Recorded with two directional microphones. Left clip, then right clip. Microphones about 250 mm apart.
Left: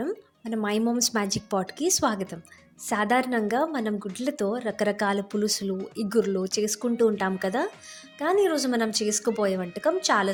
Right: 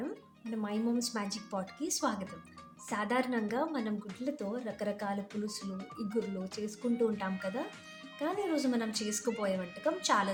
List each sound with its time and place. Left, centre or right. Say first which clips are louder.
0.5 s speech: left 9 dB; left